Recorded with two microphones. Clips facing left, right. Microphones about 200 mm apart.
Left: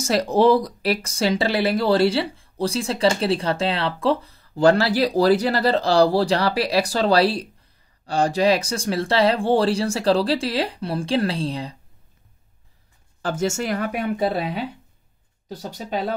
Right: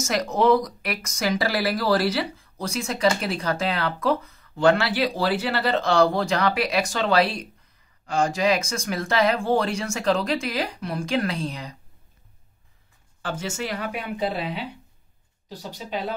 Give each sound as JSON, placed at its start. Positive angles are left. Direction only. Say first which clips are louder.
{"t": 0.0, "sound": "speech", "louder": "left 4 dB", "side_deg": 30}
{"t": 13.2, "sound": "speech", "louder": "left 6 dB", "side_deg": 45}